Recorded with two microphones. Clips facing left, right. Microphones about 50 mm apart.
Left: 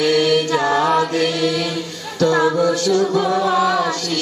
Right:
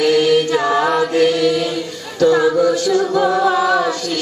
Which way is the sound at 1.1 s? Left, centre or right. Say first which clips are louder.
Right 4 dB; centre.